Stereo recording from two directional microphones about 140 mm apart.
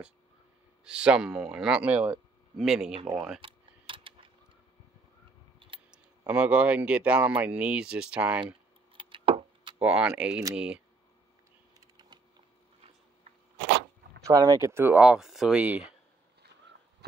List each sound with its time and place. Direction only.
0.8 s speech: 5° right (ahead or behind)
3.3 s typing: 40° right (ahead or behind)
5.6 s a sound: 40° right (ahead or behind)
6.2 s speech: 10° right (ahead or behind)
8.9 s keys jangling: 35° right (ahead or behind)
9.8 s speech: 10° right (ahead or behind)
11.8 s typing: 25° right (ahead or behind)
14.2 s speech: 25° right (ahead or behind); by 15.9 s 10° right (ahead or behind)